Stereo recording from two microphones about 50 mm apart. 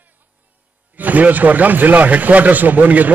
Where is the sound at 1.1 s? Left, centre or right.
Right.